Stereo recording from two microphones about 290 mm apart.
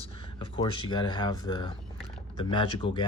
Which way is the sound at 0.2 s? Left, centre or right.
Centre.